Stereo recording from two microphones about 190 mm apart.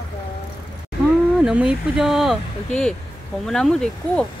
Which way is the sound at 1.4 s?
5° right (ahead or behind).